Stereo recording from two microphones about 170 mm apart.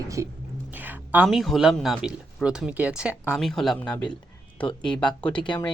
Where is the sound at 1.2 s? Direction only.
Centre (ahead or behind).